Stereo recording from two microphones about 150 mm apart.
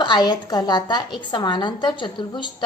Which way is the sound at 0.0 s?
30° left (ahead or behind).